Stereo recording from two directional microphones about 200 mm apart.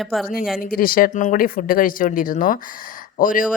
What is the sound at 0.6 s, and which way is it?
Speech, 45° left (ahead or behind).